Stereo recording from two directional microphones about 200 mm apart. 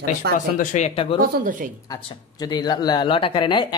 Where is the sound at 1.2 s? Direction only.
40° right (ahead or behind).